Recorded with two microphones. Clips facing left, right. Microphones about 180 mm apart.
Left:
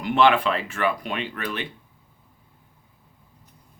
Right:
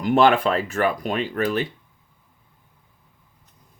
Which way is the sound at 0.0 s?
40° right (ahead or behind).